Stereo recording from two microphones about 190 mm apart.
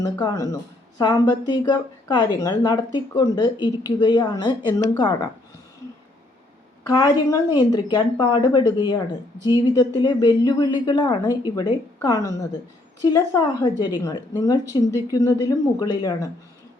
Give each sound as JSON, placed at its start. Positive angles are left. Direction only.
{"t": 0.0, "sound": "speech", "side_deg": 15}
{"t": 6.8, "sound": "a woman's voice", "side_deg": 20}